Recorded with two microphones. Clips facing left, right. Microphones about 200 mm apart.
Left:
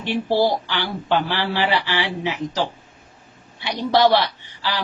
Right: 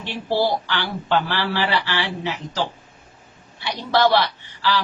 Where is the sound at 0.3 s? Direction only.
15° left (ahead or behind).